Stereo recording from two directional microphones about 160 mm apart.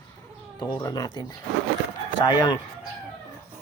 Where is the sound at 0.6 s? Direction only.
20° left (ahead or behind).